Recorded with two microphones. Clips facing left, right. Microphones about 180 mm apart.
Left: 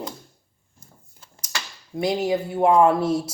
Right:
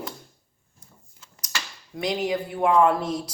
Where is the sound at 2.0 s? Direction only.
25° left (ahead or behind).